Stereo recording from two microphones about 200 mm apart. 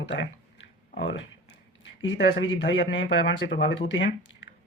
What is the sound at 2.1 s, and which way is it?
Speech, 65° left (ahead or behind).